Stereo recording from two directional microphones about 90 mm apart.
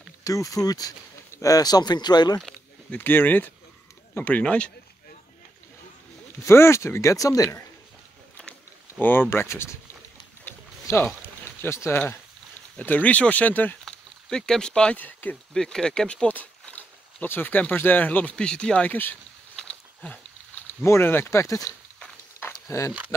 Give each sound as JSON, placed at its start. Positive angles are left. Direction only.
{"t": 0.2, "sound": "speech", "side_deg": 40}
{"t": 2.9, "sound": "speech", "side_deg": 25}
{"t": 6.4, "sound": "speech", "side_deg": 30}
{"t": 9.0, "sound": "speech", "side_deg": 25}
{"t": 10.4, "sound": "a sound", "side_deg": 25}
{"t": 11.6, "sound": "speech", "side_deg": 30}
{"t": 12.7, "sound": "speech", "side_deg": 15}
{"t": 13.8, "sound": "speech", "side_deg": 5}
{"t": 15.5, "sound": "speech", "side_deg": 5}
{"t": 19.7, "sound": "a sound", "side_deg": 15}
{"t": 20.8, "sound": "speech", "side_deg": 30}
{"t": 22.7, "sound": "speech", "side_deg": 35}